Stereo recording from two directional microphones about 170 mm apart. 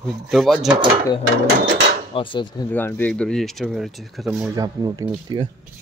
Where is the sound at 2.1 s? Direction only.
30° left (ahead or behind).